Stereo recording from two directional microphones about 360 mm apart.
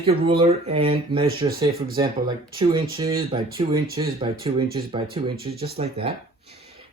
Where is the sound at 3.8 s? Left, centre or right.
Right.